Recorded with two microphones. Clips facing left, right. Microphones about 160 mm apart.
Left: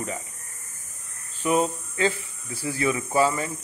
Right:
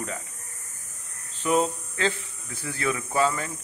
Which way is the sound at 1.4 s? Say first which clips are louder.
Left 1 dB; 5° left (ahead or behind).